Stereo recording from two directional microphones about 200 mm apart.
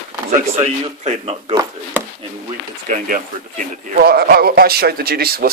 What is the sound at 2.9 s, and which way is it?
A man's voice, 40° right (ahead or behind).